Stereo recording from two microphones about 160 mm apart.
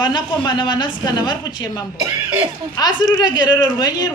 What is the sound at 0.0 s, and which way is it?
Speech, 30° left (ahead or behind).